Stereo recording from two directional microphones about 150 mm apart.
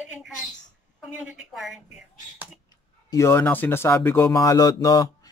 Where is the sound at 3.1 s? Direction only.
20° left (ahead or behind).